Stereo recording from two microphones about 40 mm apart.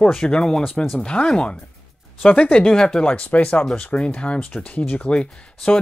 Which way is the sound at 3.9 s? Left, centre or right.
Left.